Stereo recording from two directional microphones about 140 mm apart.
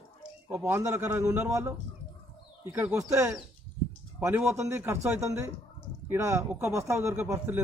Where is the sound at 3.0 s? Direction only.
20° right (ahead or behind).